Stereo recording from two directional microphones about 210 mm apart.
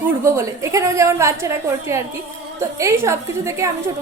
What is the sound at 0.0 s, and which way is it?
A woman's voice, 10° right (ahead or behind).